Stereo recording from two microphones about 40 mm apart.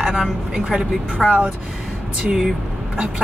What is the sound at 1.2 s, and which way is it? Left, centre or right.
Speech, centre.